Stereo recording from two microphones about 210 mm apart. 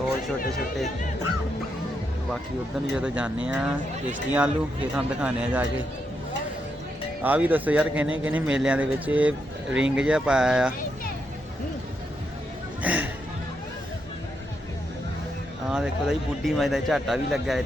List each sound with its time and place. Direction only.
2.9 s speech: 5° right (ahead or behind)
7.2 s a man's voice: 5° right (ahead or behind)
12.8 s a sound: 5° right (ahead or behind)
15.7 s speech: 5° right (ahead or behind)